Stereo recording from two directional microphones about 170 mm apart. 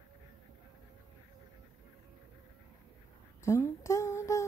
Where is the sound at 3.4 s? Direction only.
15° left (ahead or behind).